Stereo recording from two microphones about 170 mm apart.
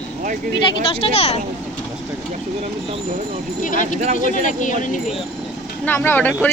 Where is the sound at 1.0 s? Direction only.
35° left (ahead or behind).